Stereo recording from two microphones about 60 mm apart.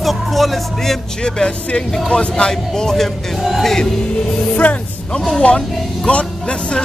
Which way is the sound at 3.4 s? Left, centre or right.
Centre.